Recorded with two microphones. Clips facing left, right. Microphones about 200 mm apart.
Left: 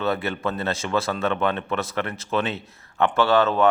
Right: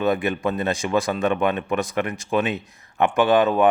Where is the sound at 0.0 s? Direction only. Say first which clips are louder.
Right 3 dB; 15° right (ahead or behind).